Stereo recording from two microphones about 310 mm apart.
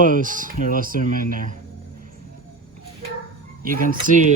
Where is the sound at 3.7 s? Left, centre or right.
Right.